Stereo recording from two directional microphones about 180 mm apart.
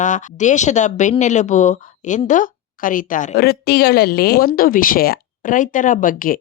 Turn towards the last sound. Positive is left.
turn(degrees=50)  # may be behind; listen again after turning